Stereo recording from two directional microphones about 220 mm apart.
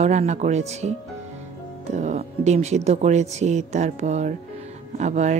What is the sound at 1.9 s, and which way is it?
A woman's voice, 30° right (ahead or behind).